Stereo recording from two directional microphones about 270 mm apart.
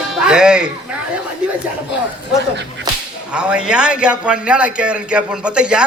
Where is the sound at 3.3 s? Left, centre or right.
Centre.